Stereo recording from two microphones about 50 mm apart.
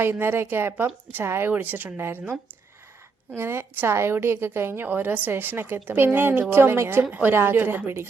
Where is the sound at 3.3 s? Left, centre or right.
Right.